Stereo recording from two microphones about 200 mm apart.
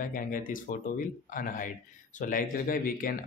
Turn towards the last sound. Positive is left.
turn(degrees=45)  # may be behind; listen again after turning